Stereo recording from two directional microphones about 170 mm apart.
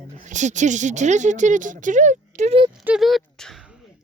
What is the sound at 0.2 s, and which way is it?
Speech, 45° right (ahead or behind).